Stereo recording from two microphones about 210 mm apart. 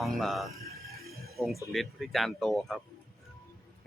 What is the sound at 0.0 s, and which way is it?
Speech, centre (ahead or behind).